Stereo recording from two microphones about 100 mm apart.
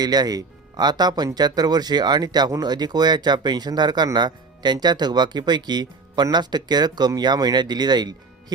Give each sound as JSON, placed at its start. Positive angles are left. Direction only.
{"t": 0.0, "sound": "speech", "side_deg": -40}